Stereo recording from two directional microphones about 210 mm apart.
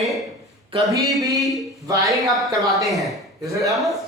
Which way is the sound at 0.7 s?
15° right (ahead or behind).